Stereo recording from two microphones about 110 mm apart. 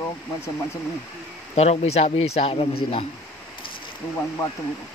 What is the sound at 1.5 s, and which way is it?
Speech, 75° left (ahead or behind).